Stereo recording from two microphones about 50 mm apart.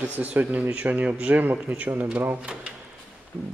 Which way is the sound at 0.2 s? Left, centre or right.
Right.